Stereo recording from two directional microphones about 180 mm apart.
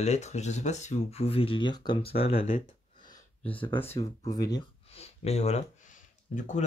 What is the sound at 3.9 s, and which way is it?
Speech, 35° left (ahead or behind).